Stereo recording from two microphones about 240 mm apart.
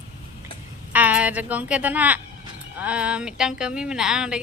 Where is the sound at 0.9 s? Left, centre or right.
Centre.